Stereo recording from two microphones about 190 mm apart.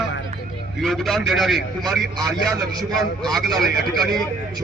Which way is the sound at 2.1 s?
20° right (ahead or behind).